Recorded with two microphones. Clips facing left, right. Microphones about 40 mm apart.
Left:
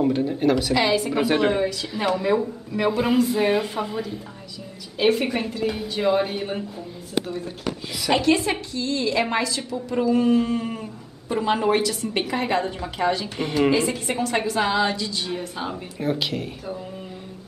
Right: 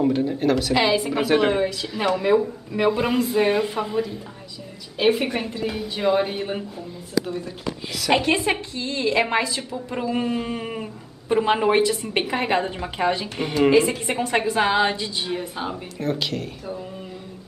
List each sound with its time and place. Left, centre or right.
0.0 s speech: centre
0.7 s speech: centre
1.1 s speech: centre
8.1 s a woman's voice: centre
13.4 s a woman's voice: centre
16.0 s speech: centre